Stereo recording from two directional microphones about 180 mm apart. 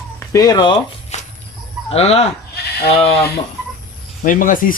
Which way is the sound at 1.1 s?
40° left (ahead or behind).